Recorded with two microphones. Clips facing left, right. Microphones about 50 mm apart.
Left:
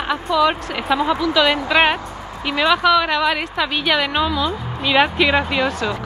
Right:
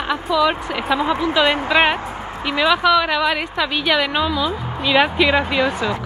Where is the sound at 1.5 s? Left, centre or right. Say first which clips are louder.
Even; right.